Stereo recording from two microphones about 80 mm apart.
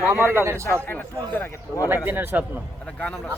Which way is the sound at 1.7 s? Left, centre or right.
Left.